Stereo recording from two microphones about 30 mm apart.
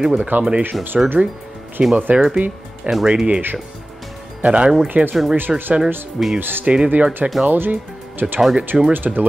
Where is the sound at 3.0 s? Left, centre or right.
Right.